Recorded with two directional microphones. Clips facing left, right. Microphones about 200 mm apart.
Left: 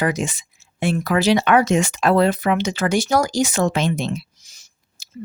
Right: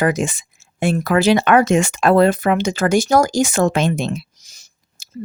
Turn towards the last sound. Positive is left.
turn(degrees=-40)  # may be behind; listen again after turning